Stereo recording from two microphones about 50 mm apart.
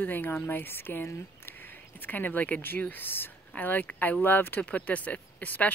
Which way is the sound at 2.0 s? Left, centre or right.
Left.